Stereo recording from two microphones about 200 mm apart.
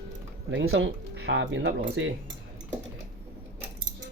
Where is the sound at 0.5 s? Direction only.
70° right (ahead or behind).